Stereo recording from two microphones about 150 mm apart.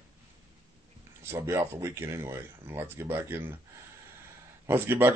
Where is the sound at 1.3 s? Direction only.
15° right (ahead or behind).